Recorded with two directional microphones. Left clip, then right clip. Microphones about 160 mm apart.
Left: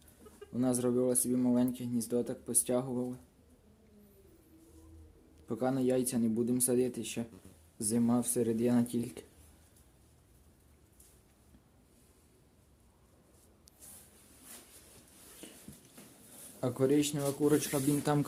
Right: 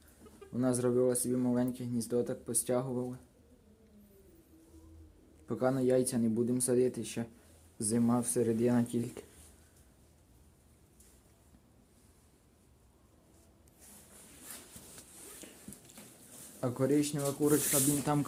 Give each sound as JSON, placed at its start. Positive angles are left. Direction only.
{"t": 0.5, "sound": "speech", "side_deg": 5}
{"t": 5.5, "sound": "speech", "side_deg": 5}
{"t": 15.4, "sound": "a sound", "side_deg": 30}
{"t": 16.6, "sound": "speech", "side_deg": 15}